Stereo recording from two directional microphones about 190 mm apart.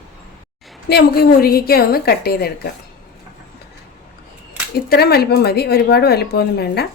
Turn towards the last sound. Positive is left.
turn(degrees=55)  # may be behind; listen again after turning